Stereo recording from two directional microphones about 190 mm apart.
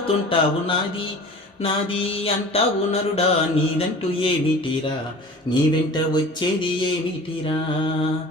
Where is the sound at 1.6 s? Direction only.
30° left (ahead or behind).